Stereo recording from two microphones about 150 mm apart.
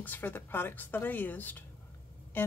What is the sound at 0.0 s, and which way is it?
Speech, 10° left (ahead or behind).